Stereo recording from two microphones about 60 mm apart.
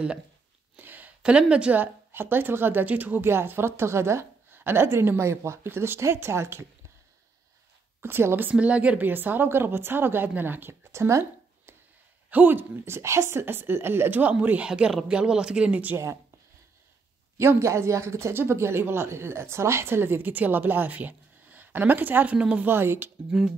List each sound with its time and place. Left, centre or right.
0.7 s a sound: right
1.5 s speech: centre
1.8 s speech: right
3.3 s a woman's voice: right
4.6 s a woman's voice: right
8.0 s speech: right
8.5 s speech: right
9.0 s speech: right
12.3 s speech: right
14.2 s speech: right
14.7 s speech: centre; by 16.0 s right
17.4 s speech: right
22.7 s speech: right